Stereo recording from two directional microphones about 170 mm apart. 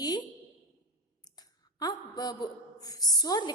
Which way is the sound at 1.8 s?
25° left (ahead or behind).